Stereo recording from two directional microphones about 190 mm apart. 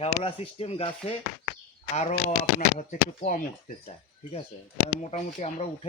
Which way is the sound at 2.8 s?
40° left (ahead or behind).